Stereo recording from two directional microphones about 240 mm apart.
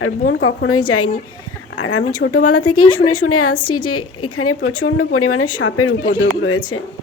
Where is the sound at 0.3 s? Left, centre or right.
Left.